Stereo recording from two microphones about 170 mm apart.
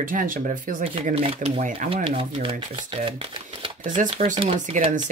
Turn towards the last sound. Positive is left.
turn(degrees=-30)  # may be behind; listen again after turning